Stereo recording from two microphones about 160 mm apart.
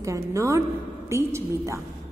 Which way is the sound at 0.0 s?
20° right (ahead or behind).